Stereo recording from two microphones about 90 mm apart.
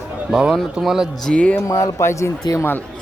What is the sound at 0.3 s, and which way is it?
Speech, 10° right (ahead or behind).